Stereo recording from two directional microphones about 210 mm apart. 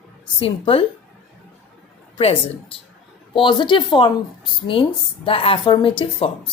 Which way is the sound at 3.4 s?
20° left (ahead or behind).